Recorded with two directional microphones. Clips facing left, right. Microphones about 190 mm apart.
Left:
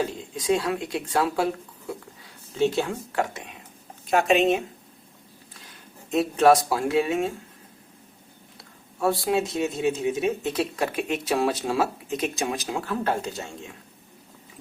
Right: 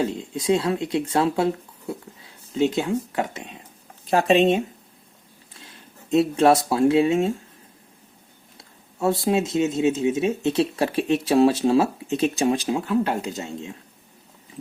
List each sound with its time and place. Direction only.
0.1 s speech: 25° right (ahead or behind)
2.6 s speech: 20° right (ahead or behind)
4.0 s speech: 35° right (ahead or behind)
6.1 s speech: 25° right (ahead or behind)
9.0 s speech: 20° right (ahead or behind)
12.7 s speech: 15° right (ahead or behind)